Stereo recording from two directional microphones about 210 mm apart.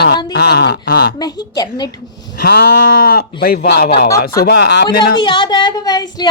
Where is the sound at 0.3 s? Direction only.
50° left (ahead or behind).